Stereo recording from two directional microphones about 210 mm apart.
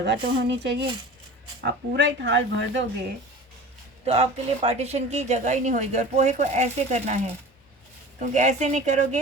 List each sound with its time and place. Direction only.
0.0 s speech: 55° right (ahead or behind)
4.0 s speech: 30° right (ahead or behind)
8.2 s speech: 35° right (ahead or behind)